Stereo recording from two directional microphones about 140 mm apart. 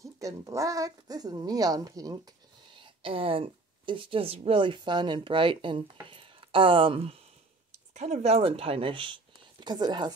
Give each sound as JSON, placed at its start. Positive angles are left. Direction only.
{"t": 0.0, "sound": "speech", "side_deg": -20}
{"t": 2.7, "sound": "speech", "side_deg": -40}
{"t": 7.7, "sound": "speech", "side_deg": -55}